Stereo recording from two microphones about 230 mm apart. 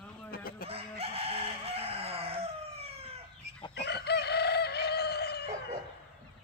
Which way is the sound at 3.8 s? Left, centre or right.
Left.